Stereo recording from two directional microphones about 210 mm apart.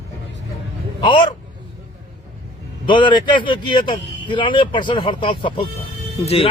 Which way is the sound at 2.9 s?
20° left (ahead or behind).